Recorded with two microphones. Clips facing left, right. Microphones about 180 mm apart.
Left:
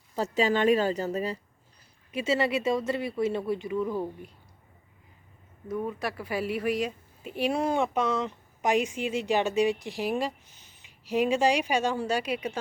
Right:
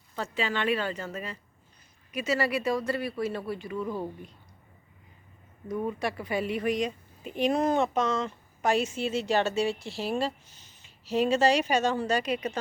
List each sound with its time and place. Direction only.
0.2 s speech: 40° left (ahead or behind)
2.1 s speech: 25° left (ahead or behind)
5.6 s a woman's voice: centre (ahead or behind)